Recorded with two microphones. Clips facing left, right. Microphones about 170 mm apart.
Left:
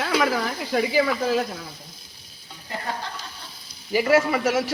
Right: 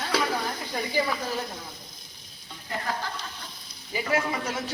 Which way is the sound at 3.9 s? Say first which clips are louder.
Left 8 dB; 80° left.